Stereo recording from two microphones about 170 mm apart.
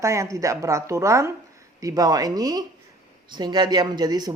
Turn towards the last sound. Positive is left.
turn(degrees=-25)  # may be behind; listen again after turning